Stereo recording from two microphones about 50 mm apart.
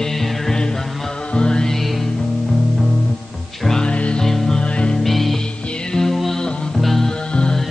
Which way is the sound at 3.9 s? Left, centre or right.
Left.